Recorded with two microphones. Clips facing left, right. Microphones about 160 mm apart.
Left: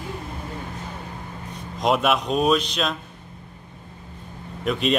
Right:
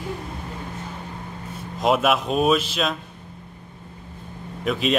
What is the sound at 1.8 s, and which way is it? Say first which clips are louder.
Speech: right 1 dB; centre (ahead or behind).